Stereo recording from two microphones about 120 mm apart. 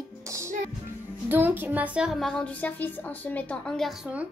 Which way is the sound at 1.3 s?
15° right (ahead or behind).